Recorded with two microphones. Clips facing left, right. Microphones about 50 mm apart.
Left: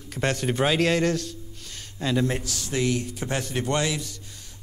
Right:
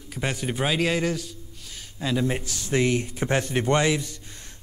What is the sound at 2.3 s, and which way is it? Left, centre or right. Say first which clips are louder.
Speech: right 1 dB; centre.